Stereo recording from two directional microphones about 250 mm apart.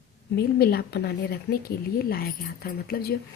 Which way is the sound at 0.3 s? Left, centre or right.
Left.